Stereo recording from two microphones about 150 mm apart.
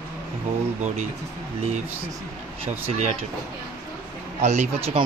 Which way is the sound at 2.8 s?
50° right (ahead or behind).